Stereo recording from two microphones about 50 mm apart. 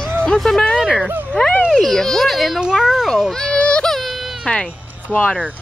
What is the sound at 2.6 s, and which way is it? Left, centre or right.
Speech, centre.